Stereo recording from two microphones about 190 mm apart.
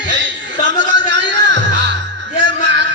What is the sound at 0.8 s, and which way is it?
Music, 70° right (ahead or behind).